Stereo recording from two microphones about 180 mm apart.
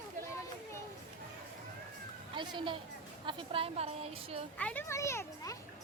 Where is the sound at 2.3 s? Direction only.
25° right (ahead or behind).